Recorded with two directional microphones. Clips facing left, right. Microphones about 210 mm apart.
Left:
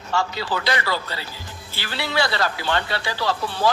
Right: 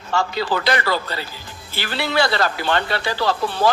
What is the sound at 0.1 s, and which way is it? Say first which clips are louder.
Speech: right 3 dB; 55° right (ahead or behind).